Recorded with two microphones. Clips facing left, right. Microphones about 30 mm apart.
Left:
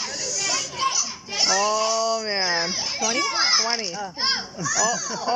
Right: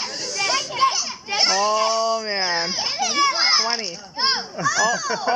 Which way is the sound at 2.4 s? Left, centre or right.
Centre.